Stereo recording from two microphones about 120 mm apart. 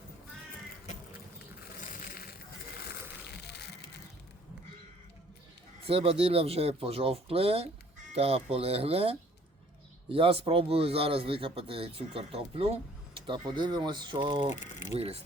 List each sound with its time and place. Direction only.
1.8 s crushing: 90° left
5.8 s a man's voice: 50° right (ahead or behind)
14.5 s speech: 90° left
14.9 s speech: 60° right (ahead or behind)